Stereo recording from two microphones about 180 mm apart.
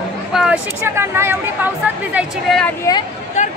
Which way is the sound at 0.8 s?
15° right (ahead or behind).